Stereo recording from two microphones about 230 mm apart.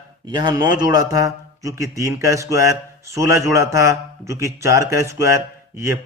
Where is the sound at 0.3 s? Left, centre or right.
Centre.